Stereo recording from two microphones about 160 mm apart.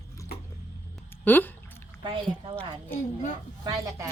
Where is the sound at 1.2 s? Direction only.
10° left (ahead or behind).